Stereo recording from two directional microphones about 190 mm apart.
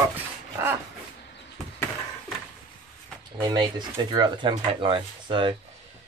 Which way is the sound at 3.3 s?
20° right (ahead or behind).